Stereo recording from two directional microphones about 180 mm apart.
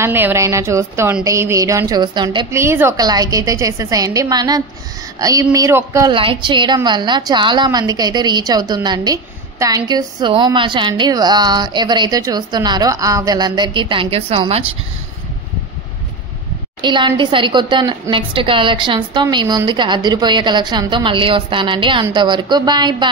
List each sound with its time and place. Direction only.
0.0 s a woman's voice: 15° right (ahead or behind)
2.5 s a woman's voice: 15° right (ahead or behind)
6.1 s a woman's voice: 30° right (ahead or behind)
16.8 s a woman's voice: 25° right (ahead or behind)